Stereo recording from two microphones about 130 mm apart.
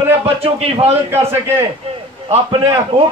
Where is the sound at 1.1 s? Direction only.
20° right (ahead or behind).